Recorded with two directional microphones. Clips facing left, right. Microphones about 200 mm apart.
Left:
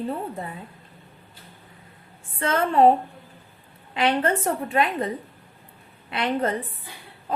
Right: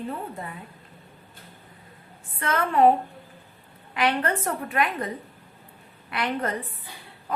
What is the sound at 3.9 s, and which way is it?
A woman's voice, 25° left (ahead or behind).